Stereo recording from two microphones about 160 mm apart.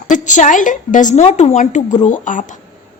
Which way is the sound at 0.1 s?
50° left (ahead or behind).